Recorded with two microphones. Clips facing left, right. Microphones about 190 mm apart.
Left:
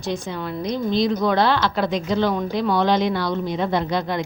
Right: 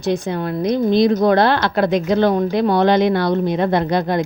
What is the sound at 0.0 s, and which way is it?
Speech, 60° right (ahead or behind).